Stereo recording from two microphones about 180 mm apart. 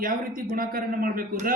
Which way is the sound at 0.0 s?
50° right (ahead or behind).